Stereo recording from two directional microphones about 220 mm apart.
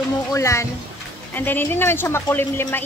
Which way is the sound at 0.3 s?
15° left (ahead or behind).